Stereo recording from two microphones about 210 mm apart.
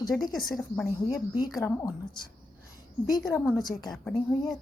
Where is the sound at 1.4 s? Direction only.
15° left (ahead or behind).